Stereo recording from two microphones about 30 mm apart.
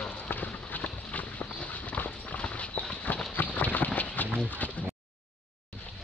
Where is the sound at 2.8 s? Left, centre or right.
Left.